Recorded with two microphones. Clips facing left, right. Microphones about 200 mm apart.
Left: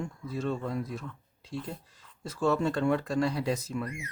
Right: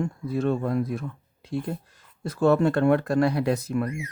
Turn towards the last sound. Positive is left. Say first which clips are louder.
# right 6 dB
turn(degrees=-60)  # may be behind; listen again after turning